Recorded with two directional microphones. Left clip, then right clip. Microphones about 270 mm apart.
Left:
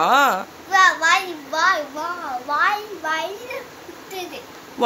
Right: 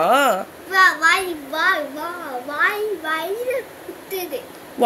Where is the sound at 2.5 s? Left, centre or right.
Centre.